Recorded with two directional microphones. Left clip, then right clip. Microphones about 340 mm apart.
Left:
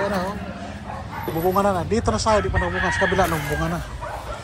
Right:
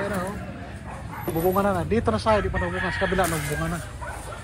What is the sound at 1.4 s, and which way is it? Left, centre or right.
Speech, centre.